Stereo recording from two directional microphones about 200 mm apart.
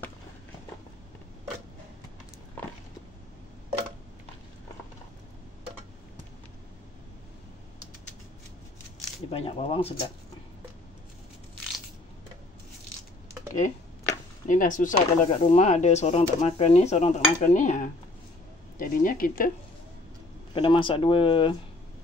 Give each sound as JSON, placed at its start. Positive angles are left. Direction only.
{"t": 9.3, "sound": "speech", "side_deg": 30}
{"t": 14.5, "sound": "speech", "side_deg": 40}
{"t": 20.5, "sound": "speech", "side_deg": 25}